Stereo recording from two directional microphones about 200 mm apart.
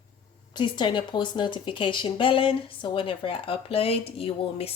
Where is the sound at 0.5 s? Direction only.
25° left (ahead or behind).